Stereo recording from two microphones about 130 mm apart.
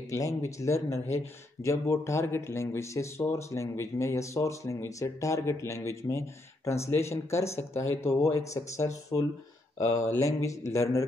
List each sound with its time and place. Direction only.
0.1 s speech: 25° left (ahead or behind)